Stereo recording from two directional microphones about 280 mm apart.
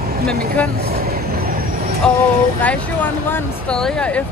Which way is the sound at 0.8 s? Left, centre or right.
Right.